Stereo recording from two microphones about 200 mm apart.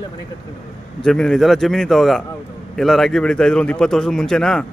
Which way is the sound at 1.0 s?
Centre (ahead or behind).